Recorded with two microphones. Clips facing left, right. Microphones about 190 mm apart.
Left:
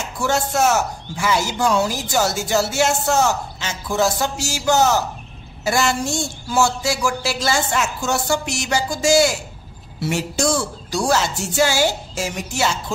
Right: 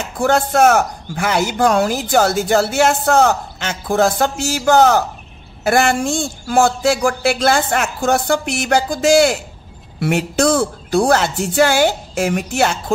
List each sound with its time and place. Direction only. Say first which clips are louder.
0.2 s a man's voice: right 6 dB; 55° right (ahead or behind)